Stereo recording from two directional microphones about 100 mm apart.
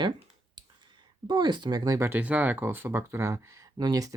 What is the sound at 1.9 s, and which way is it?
Speech, 25° right (ahead or behind).